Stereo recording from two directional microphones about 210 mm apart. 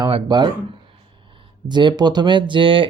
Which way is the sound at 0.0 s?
20° right (ahead or behind).